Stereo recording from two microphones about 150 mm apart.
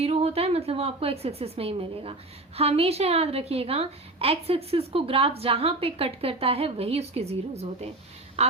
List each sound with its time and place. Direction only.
0.0 s a woman's voice: 45° right (ahead or behind)